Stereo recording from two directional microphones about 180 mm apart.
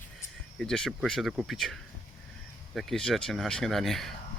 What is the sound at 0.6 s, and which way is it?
Speech, 5° left (ahead or behind).